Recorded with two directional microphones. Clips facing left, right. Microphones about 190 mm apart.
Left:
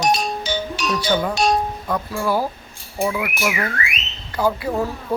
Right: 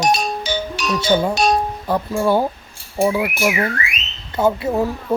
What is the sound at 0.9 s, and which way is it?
Speech, 25° right (ahead or behind).